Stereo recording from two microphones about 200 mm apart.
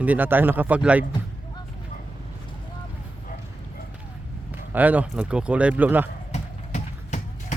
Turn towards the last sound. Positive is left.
turn(degrees=35)  # may be behind; listen again after turning